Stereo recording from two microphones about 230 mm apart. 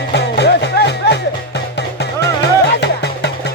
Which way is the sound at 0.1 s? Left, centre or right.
Left.